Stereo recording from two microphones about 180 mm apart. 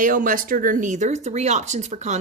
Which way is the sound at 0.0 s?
45° right (ahead or behind).